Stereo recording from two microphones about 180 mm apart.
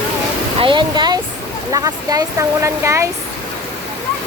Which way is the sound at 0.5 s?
25° right (ahead or behind).